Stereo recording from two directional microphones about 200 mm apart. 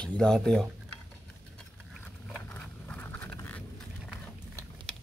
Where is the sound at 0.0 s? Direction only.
5° left (ahead or behind).